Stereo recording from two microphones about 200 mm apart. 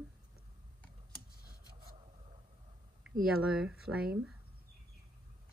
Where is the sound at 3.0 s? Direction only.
5° right (ahead or behind).